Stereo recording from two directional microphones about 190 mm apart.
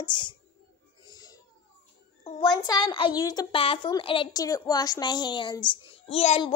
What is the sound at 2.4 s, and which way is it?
A woman's voice, 20° left (ahead or behind).